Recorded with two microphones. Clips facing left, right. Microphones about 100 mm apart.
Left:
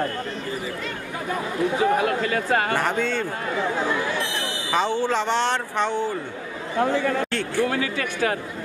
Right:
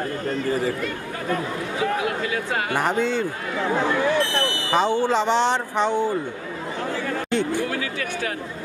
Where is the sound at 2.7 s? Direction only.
15° right (ahead or behind).